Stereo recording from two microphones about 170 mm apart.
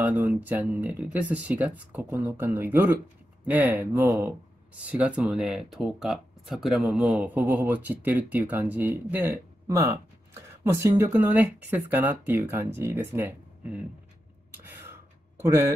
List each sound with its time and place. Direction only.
0.0 s speech: 10° right (ahead or behind)
4.7 s speech: 10° right (ahead or behind)
14.5 s gasp: 10° right (ahead or behind)
15.4 s speech: 15° right (ahead or behind)